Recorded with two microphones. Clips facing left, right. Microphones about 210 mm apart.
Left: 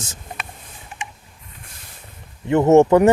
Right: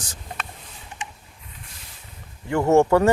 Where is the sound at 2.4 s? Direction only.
20° left (ahead or behind).